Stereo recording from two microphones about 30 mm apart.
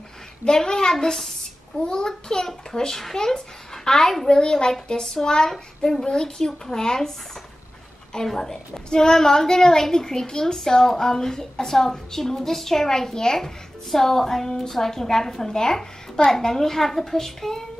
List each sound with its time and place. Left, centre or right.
0.5 s a child's voice: centre
4.0 s a woman's voice: centre
4.3 s a child's voice: left
8.3 s a woman's voice: centre